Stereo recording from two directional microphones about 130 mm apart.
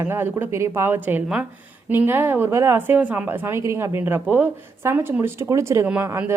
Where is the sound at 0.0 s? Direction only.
15° right (ahead or behind).